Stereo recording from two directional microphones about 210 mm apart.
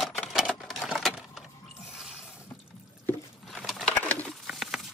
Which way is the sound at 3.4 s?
Centre (ahead or behind).